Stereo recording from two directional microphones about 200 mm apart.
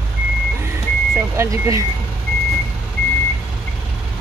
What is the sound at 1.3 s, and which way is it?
Speech, 15° right (ahead or behind).